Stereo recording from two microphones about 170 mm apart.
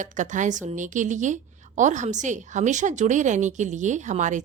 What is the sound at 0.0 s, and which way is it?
A woman's voice, 45° right (ahead or behind).